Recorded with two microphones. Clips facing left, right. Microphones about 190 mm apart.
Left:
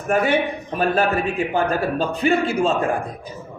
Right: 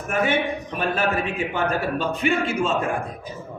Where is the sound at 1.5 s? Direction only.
35° left (ahead or behind).